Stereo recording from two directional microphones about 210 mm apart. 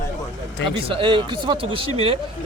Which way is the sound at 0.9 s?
25° right (ahead or behind).